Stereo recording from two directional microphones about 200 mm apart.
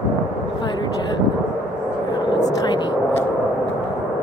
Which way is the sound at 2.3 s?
20° left (ahead or behind).